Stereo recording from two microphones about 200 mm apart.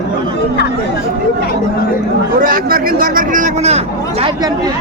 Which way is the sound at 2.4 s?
45° right (ahead or behind).